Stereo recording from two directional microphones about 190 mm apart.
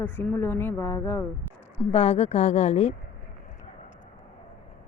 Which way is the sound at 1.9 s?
30° left (ahead or behind).